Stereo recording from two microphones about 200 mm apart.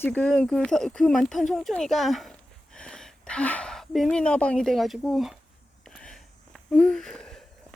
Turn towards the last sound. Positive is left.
turn(degrees=0)  # may be behind; listen again after turning